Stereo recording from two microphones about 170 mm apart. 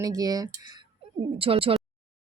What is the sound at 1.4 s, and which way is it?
Speech, 35° right (ahead or behind).